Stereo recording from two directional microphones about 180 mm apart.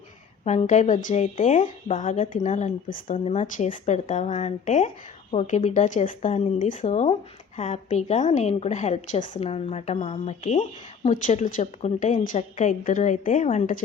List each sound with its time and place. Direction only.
0.4 s a woman's voice: 40° left (ahead or behind)